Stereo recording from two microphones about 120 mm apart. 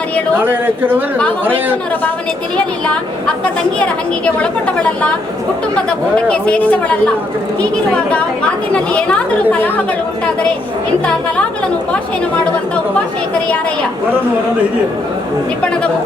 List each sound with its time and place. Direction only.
0.4 s speech: 15° right (ahead or behind)
2.8 s speech: 10° left (ahead or behind)
4.4 s speech: 10° left (ahead or behind)
8.7 s speech: 10° left (ahead or behind)